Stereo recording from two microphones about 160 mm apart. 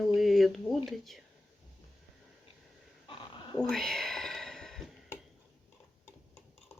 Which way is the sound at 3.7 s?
Centre (ahead or behind).